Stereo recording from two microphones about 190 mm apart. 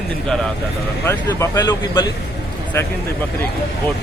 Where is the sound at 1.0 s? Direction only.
15° left (ahead or behind).